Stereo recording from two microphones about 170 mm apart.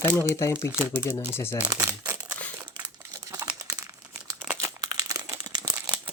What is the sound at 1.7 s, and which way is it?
Crumpling, 15° right (ahead or behind).